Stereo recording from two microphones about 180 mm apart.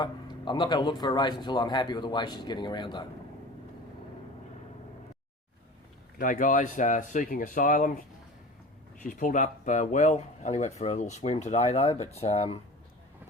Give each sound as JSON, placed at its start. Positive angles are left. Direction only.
{"t": 0.0, "sound": "speech", "side_deg": 25}
{"t": 6.1, "sound": "speech", "side_deg": 50}
{"t": 9.0, "sound": "speech", "side_deg": 45}